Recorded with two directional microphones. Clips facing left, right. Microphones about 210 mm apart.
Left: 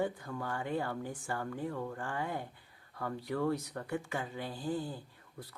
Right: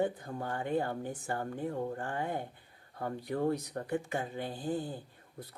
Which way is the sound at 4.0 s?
20° right (ahead or behind).